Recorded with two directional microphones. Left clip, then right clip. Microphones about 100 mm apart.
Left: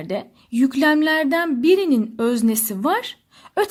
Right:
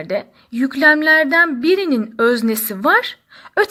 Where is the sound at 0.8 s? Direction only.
35° left (ahead or behind).